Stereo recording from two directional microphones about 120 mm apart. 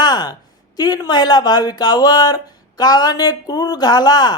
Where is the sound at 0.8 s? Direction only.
35° left (ahead or behind).